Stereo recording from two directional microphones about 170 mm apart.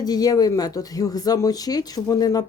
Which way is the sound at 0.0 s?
20° left (ahead or behind).